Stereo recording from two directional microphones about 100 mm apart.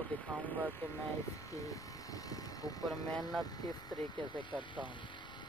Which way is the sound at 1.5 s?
35° left (ahead or behind).